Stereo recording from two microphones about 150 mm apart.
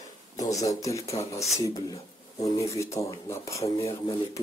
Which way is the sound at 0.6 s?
20° left (ahead or behind).